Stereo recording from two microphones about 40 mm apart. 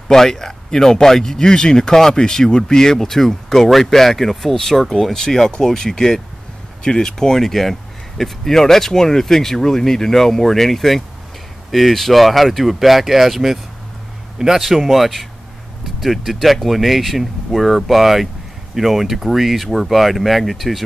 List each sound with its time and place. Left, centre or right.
0.1 s speech: centre